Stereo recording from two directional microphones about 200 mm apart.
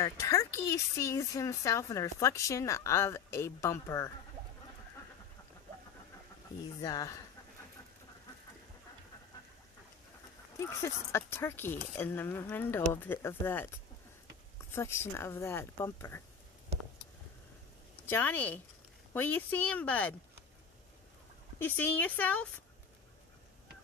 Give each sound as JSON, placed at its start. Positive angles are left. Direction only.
{"t": 0.0, "sound": "a woman's voice", "side_deg": 15}
{"t": 6.8, "sound": "a woman's voice", "side_deg": 20}
{"t": 10.6, "sound": "a woman's voice", "side_deg": 15}
{"t": 14.7, "sound": "a woman's voice", "side_deg": 10}
{"t": 18.0, "sound": "a woman's voice", "side_deg": 10}
{"t": 21.5, "sound": "a woman's voice", "side_deg": 10}